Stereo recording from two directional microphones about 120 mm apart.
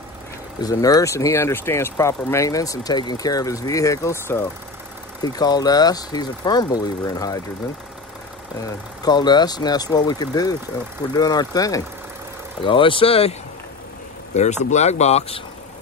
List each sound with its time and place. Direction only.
0.6 s speech: 30° left (ahead or behind)
5.2 s speech: 35° left (ahead or behind)
8.6 s speech: 35° left (ahead or behind)
12.6 s speech: 45° left (ahead or behind)
14.3 s speech: 75° left (ahead or behind); by 15.4 s 60° left (ahead or behind)